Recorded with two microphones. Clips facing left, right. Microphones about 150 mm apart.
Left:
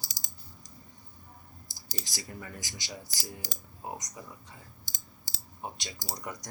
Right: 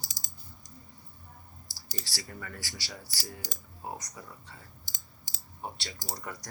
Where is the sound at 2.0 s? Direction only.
15° left (ahead or behind).